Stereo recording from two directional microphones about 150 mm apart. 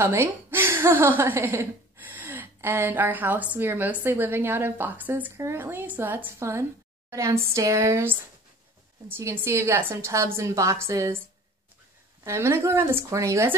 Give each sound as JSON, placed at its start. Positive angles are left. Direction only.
{"t": 0.0, "sound": "a woman's voice", "side_deg": -15}
{"t": 12.2, "sound": "a woman's voice", "side_deg": -15}